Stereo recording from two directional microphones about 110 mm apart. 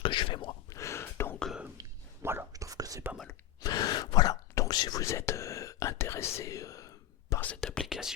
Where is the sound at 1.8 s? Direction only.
20° right (ahead or behind).